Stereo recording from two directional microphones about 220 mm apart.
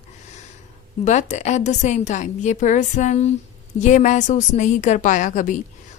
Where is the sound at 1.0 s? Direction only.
30° left (ahead or behind).